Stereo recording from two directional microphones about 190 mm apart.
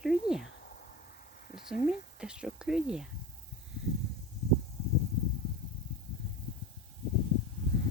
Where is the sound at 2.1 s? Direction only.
5° right (ahead or behind).